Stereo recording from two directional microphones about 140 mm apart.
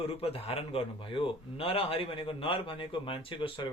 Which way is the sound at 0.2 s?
45° left (ahead or behind).